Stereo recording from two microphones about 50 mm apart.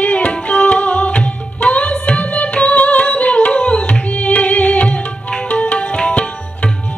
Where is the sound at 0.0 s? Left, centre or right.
Left.